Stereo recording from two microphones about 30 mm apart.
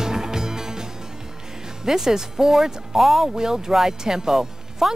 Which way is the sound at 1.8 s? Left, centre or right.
Centre.